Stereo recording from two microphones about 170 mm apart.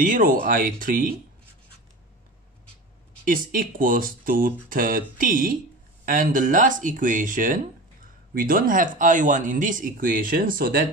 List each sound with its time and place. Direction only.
0.0 s speech: 50° right (ahead or behind)
3.3 s speech: 55° right (ahead or behind)